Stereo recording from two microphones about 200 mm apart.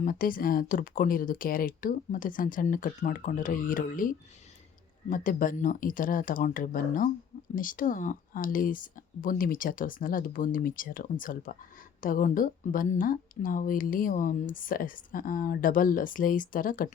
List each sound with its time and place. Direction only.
0.0 s a woman's voice: 45° left (ahead or behind)